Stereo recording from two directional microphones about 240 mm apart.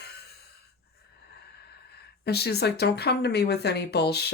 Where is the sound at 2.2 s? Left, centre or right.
Left.